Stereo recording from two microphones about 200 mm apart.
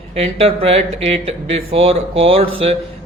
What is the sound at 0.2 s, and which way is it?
Mantra, 30° right (ahead or behind).